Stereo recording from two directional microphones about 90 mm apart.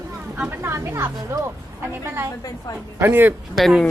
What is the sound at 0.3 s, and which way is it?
Speech, 15° right (ahead or behind).